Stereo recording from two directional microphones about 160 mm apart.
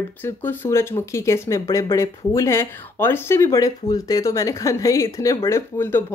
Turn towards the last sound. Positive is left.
turn(degrees=15)  # may be behind; listen again after turning